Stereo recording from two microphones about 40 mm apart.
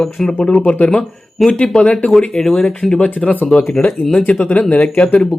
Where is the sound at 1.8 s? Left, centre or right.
Left.